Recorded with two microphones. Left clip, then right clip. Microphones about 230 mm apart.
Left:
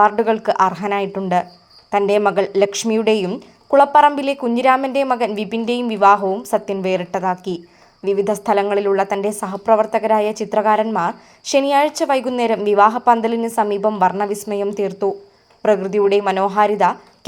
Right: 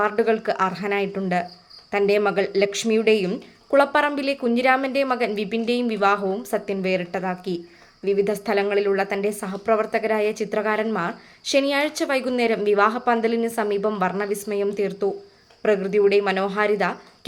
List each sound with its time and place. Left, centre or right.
0.0 s a woman's voice: centre